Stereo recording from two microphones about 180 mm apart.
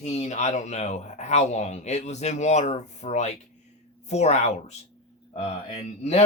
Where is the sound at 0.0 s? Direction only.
40° left (ahead or behind).